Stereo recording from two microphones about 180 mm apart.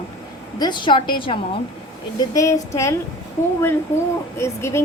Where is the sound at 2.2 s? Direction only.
20° left (ahead or behind).